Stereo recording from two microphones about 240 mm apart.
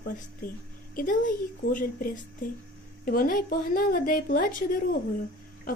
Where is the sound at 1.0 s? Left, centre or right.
Left.